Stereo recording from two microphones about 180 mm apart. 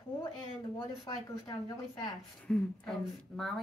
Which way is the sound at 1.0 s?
25° left (ahead or behind).